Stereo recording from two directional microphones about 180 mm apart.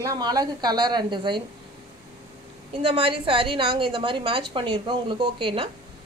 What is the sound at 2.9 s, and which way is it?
A woman's voice, 30° right (ahead or behind).